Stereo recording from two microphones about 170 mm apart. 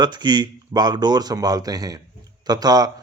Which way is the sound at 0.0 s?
25° right (ahead or behind).